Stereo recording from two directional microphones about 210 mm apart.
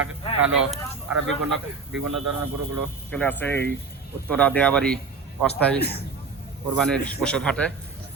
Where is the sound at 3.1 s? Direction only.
5° left (ahead or behind).